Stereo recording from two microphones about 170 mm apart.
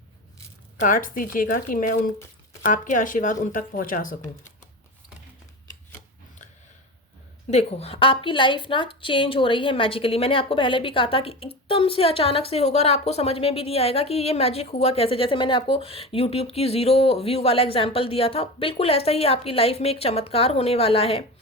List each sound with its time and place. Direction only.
0.8 s speech: 55° left (ahead or behind)
7.5 s a woman's voice: 35° left (ahead or behind)